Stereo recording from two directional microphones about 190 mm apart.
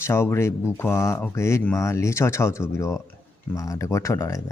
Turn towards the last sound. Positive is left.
turn(degrees=15)  # may be behind; listen again after turning